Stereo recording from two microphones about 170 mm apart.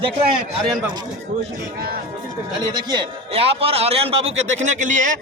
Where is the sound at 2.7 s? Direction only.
25° right (ahead or behind).